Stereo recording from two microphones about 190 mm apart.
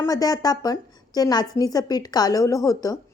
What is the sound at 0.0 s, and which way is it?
A woman's voice, 20° left (ahead or behind).